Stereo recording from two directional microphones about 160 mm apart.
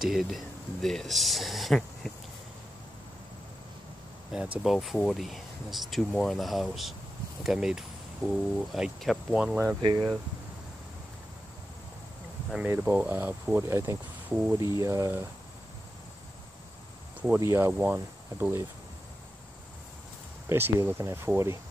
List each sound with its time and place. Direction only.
0.0 s speech: centre (ahead or behind)
4.3 s speech: 5° right (ahead or behind)
9.8 s speech: 30° right (ahead or behind)
12.4 s speech: 10° right (ahead or behind)
17.2 s speech: 15° right (ahead or behind)
20.4 s speech: 15° right (ahead or behind)